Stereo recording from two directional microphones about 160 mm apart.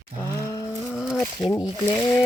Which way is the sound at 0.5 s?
25° left (ahead or behind).